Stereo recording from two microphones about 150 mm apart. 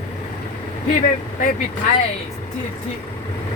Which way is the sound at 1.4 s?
55° left (ahead or behind).